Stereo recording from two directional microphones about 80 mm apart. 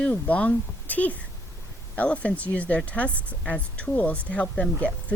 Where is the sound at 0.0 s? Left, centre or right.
Centre.